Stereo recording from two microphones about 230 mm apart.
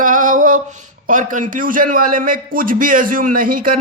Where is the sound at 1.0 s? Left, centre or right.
Right.